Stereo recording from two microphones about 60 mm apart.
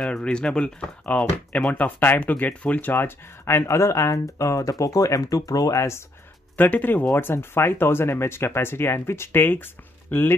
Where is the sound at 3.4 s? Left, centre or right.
Left.